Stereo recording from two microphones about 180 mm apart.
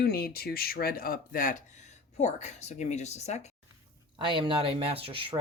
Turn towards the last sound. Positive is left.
turn(degrees=-30)  # may be behind; listen again after turning